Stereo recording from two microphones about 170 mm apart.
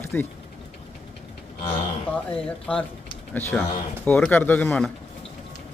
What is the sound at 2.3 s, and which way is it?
Speech, 5° left (ahead or behind).